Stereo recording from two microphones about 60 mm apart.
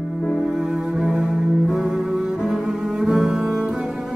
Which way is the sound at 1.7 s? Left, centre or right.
Centre.